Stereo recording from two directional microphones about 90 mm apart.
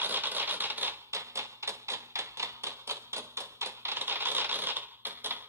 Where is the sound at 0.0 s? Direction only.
20° right (ahead or behind).